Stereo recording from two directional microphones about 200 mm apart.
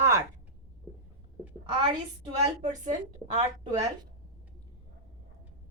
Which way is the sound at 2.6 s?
40° right (ahead or behind).